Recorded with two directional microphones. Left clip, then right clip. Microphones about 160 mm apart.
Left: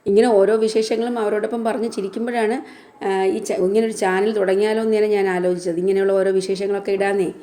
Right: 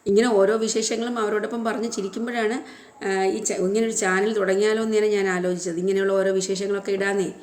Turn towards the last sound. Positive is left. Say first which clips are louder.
# left 4 dB
turn(degrees=20)  # may be behind; listen again after turning